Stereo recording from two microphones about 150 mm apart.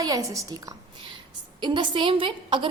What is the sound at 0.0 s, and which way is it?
A woman's voice, 25° right (ahead or behind).